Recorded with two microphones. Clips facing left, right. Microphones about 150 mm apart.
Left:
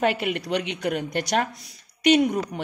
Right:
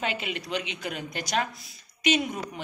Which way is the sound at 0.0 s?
60° left (ahead or behind).